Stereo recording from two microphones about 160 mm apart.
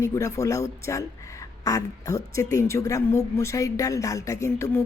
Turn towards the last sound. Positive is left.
turn(degrees=15)  # may be behind; listen again after turning